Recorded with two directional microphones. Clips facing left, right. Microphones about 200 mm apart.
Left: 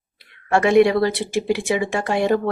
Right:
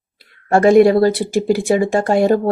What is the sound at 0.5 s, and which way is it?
Speech, 40° right (ahead or behind).